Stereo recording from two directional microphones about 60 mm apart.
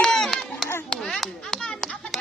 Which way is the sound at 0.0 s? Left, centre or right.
Centre.